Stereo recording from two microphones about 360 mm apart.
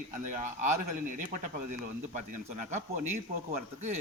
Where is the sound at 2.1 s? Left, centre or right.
Centre.